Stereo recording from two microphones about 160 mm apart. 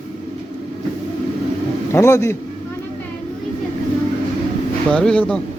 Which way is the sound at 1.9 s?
20° left (ahead or behind).